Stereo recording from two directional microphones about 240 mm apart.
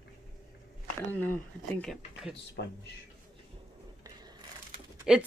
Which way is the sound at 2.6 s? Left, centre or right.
Left.